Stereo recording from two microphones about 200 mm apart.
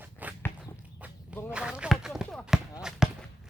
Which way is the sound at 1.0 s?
5° right (ahead or behind).